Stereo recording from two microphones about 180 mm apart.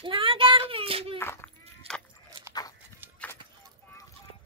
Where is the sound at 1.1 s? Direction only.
15° left (ahead or behind).